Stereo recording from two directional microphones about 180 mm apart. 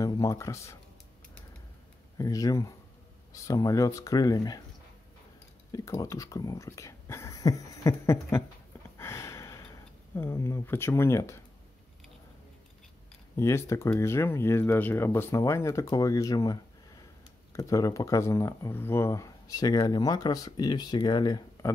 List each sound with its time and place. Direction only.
0.0 s speech: 20° left (ahead or behind)
2.1 s speech: 20° left (ahead or behind)
5.7 s speech: 20° left (ahead or behind)
8.9 s a sound: 15° left (ahead or behind)
13.4 s speech: 15° left (ahead or behind)